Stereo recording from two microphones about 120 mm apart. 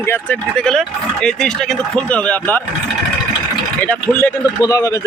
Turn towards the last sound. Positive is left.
turn(degrees=25)  # may be behind; listen again after turning